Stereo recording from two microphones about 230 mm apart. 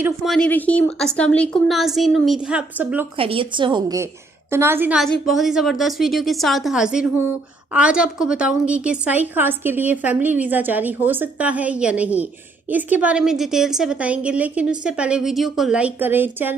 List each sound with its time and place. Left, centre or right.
0.0 s a woman's voice: centre
3.2 s a woman's voice: right